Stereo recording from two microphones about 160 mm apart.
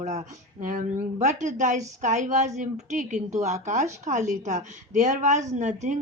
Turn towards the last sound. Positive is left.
turn(degrees=-50)  # may be behind; listen again after turning